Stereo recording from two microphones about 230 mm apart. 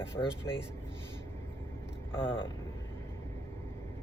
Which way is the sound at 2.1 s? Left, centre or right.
Left.